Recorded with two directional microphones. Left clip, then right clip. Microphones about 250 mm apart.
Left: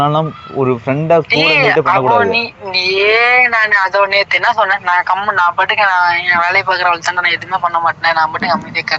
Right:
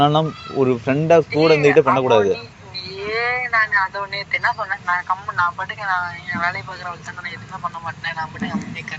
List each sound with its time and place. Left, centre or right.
0.0 s speech: centre
1.3 s a man's voice: left